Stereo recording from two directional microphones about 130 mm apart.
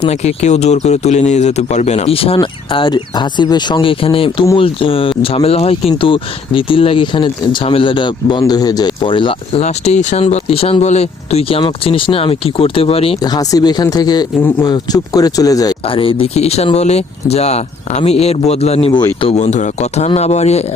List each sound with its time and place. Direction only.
0.0 s speech: 55° left (ahead or behind); by 9.3 s 40° left (ahead or behind)
9.5 s speech: 55° left (ahead or behind)
13.2 s speech: 30° left (ahead or behind)
15.9 s speech: 45° left (ahead or behind)
18.9 s speech: 35° left (ahead or behind)
19.3 s speech: 65° left (ahead or behind)